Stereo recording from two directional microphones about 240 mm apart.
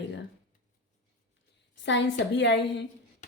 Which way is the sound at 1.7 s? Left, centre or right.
Left.